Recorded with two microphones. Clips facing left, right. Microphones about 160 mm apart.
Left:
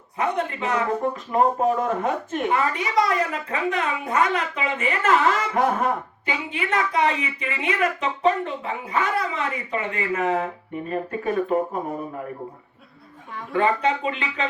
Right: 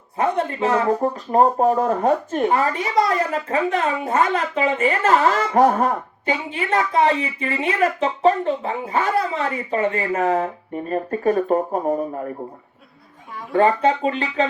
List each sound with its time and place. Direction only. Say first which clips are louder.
0.2 s speech: right 4 dB; 35° right (ahead or behind)
13.5 s speech: right 4 dB; 40° right (ahead or behind)